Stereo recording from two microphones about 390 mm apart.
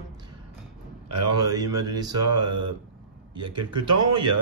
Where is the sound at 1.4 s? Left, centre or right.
Centre.